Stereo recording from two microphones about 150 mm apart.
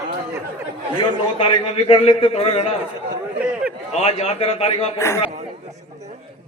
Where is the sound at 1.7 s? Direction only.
40° left (ahead or behind).